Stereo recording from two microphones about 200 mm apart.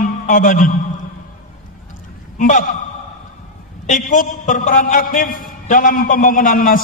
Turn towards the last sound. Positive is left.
turn(degrees=45)  # may be behind; listen again after turning